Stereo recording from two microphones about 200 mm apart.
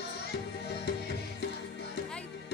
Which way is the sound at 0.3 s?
55° left (ahead or behind).